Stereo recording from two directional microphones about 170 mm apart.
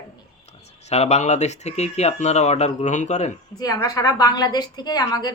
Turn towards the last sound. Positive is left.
turn(degrees=20)  # may be behind; listen again after turning